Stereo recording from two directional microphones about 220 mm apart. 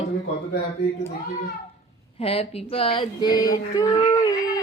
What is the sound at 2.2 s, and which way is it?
Female singing, 25° left (ahead or behind).